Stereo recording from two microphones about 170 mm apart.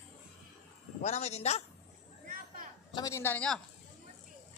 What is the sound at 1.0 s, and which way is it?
Speech, 40° left (ahead or behind).